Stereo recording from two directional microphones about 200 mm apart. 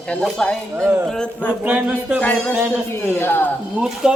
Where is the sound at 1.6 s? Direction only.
5° right (ahead or behind).